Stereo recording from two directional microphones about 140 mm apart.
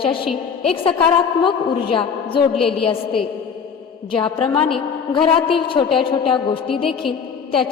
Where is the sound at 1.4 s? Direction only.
40° left (ahead or behind).